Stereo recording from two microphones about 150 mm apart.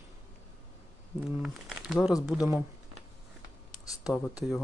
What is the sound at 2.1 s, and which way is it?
Speech, 25° left (ahead or behind).